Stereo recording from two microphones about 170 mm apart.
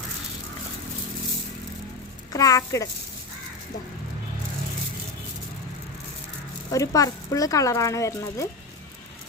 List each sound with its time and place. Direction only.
2.3 s speech: 20° left (ahead or behind)
6.7 s speech: 20° left (ahead or behind)